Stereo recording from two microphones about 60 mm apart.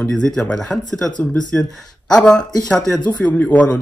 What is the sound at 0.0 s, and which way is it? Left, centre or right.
Speech, centre.